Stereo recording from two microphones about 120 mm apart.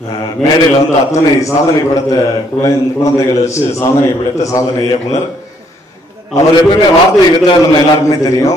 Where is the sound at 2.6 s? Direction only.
25° left (ahead or behind).